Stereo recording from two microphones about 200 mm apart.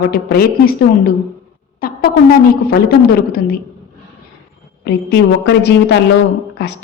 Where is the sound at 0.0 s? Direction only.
50° left (ahead or behind).